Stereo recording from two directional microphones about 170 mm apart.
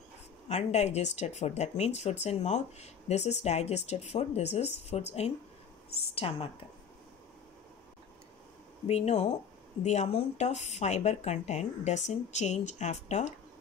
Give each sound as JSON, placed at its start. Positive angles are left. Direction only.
{"t": 0.5, "sound": "speech", "side_deg": 40}
{"t": 8.8, "sound": "speech", "side_deg": 40}